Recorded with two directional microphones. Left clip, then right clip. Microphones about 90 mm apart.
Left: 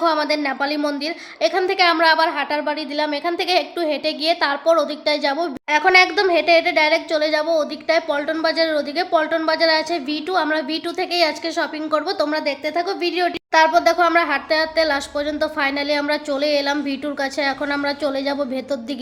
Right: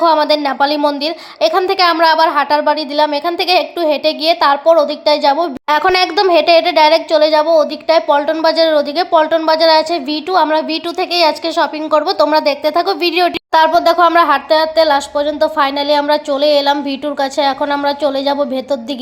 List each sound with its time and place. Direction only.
0.0 s a woman's voice: 30° right (ahead or behind)
5.6 s a woman's voice: 55° right (ahead or behind)
13.9 s speech: 35° right (ahead or behind)